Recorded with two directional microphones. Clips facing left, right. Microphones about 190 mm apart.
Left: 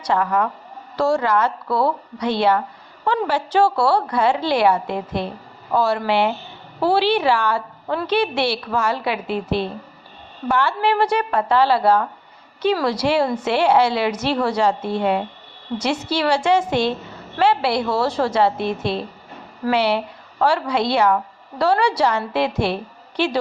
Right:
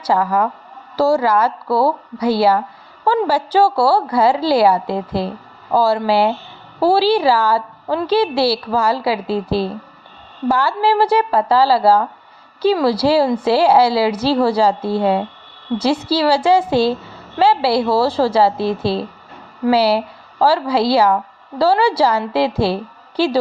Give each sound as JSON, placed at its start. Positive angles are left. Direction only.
{"t": 0.1, "sound": "a woman's voice", "side_deg": -30}
{"t": 3.0, "sound": "a woman's voice", "side_deg": -35}